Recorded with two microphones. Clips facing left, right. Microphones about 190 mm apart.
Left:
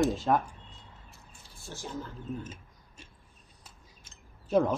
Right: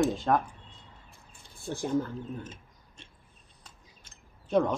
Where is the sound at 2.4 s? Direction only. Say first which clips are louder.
Left 1 dB; 10° left (ahead or behind).